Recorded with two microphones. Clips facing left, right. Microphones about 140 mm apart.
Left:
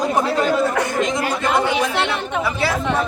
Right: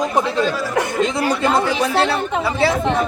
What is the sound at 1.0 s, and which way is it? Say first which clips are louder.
Speech: right 2 dB; 30° right (ahead or behind).